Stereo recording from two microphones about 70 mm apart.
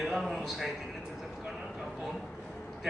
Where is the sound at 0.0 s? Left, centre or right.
Centre.